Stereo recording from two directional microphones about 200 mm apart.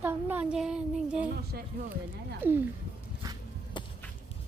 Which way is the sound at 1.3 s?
45° right (ahead or behind).